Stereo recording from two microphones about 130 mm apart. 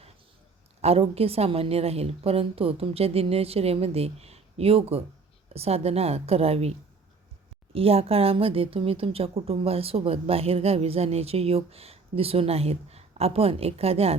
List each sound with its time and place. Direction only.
0.8 s speech: 50° right (ahead or behind)